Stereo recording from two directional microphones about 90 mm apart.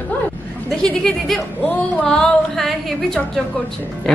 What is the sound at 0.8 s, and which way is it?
A woman's voice, 10° left (ahead or behind).